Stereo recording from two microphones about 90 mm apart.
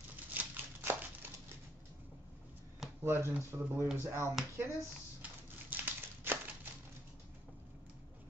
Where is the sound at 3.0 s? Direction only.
25° right (ahead or behind).